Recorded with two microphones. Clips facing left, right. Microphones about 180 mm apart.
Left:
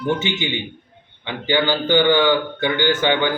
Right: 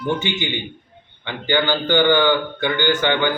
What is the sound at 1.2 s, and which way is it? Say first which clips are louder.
A man's voice: left 1 dB; 15° left (ahead or behind).